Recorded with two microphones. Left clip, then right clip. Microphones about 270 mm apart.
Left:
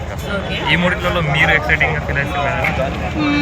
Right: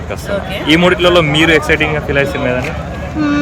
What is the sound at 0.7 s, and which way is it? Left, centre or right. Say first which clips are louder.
Speech: right 8 dB; right.